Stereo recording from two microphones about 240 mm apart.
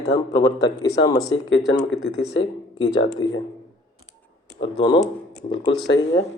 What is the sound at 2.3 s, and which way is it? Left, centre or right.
Speech, centre.